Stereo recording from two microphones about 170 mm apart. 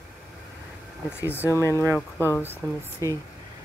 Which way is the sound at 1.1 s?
15° left (ahead or behind).